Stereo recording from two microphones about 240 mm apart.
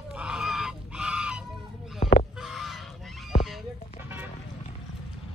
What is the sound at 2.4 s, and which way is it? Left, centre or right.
Goose, centre.